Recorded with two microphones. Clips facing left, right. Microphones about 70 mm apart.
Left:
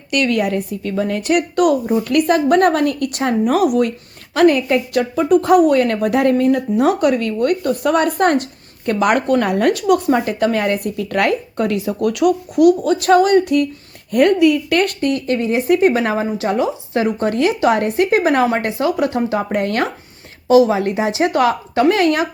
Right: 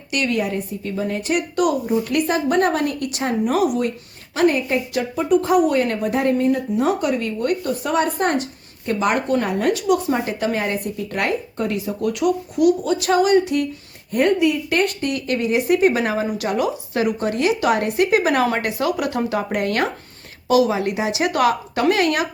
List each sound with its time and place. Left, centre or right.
0.1 s a woman's voice: left
14.1 s a woman's voice: left
15.1 s speech: left